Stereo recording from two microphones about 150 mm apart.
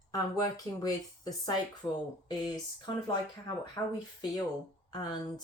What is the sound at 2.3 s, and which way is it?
Speech, 25° left (ahead or behind).